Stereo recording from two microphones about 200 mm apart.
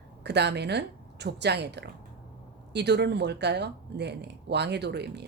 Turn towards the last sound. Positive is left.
turn(degrees=-55)  # may be behind; listen again after turning